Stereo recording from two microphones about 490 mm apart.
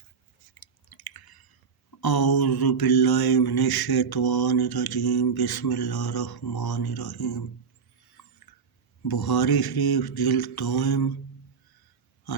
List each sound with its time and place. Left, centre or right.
0.6 s chewing: left
2.0 s mantra: left
8.2 s a sound: left
9.0 s mantra: left